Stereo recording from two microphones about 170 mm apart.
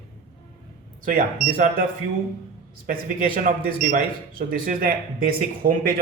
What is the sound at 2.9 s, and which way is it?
Speech, 55° right (ahead or behind).